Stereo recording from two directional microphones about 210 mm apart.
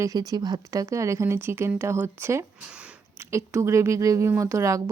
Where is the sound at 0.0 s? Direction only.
15° right (ahead or behind).